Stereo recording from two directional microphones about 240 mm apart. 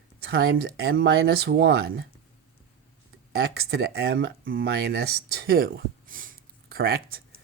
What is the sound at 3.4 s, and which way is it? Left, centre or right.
Speech, right.